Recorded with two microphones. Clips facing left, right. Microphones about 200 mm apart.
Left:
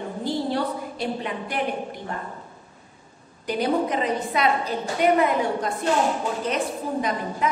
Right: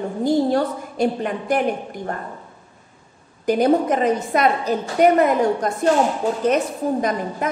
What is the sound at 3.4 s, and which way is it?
A woman's voice, 45° right (ahead or behind).